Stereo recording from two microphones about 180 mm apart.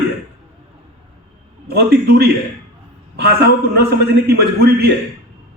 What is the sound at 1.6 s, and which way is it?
A man's voice, 60° right (ahead or behind).